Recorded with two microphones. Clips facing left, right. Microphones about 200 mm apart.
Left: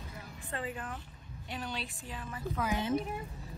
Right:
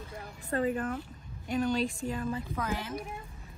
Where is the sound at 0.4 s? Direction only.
45° right (ahead or behind).